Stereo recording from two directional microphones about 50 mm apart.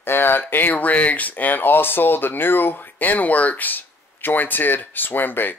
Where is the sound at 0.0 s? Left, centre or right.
Left.